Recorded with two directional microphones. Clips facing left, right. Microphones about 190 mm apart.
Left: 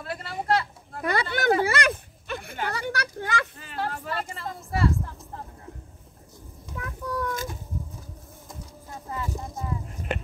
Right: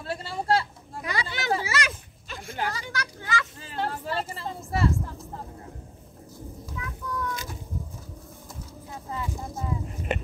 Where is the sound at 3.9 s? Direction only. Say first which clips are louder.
Right 1 dB; 30° right (ahead or behind).